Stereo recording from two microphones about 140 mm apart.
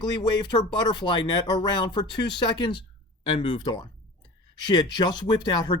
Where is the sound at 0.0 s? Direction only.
30° left (ahead or behind).